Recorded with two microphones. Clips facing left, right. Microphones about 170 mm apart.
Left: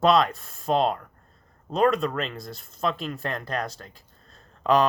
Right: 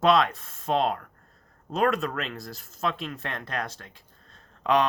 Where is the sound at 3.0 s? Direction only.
40° left (ahead or behind).